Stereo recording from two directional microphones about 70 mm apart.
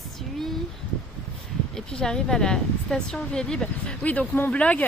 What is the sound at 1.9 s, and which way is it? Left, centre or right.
Speech, centre.